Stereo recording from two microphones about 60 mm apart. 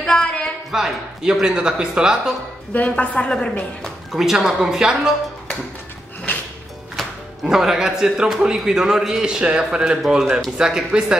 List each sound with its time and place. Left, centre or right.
0.0 s a sound: centre
0.7 s a man's voice: centre
2.7 s a woman's voice: left
4.1 s a man's voice: centre
7.0 s music: centre
7.4 s a man's voice: centre